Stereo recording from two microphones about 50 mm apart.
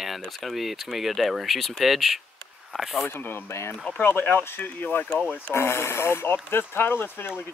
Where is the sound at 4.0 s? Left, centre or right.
Left.